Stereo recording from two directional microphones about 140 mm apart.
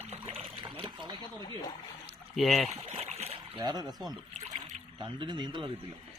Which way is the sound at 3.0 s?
45° right (ahead or behind).